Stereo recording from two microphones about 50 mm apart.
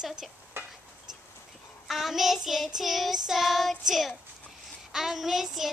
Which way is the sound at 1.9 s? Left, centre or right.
Centre.